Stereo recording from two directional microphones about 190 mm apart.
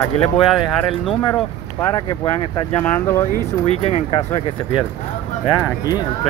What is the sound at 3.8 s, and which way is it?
Speech, 30° left (ahead or behind).